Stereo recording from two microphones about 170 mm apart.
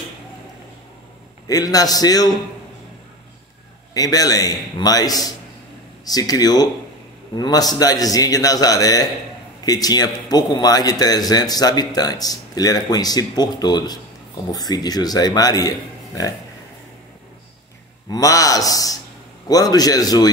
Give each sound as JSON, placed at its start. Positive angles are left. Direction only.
{"t": 1.5, "sound": "a man's voice", "side_deg": 20}
{"t": 3.9, "sound": "a man's voice", "side_deg": 20}
{"t": 18.1, "sound": "a man's voice", "side_deg": 20}